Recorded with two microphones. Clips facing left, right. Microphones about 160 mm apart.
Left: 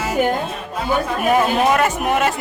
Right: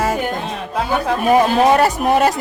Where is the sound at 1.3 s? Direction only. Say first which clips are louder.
Right 4 dB; 35° right (ahead or behind).